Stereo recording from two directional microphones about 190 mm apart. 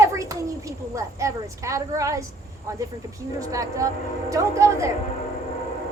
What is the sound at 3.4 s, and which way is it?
A child's voice, 15° right (ahead or behind).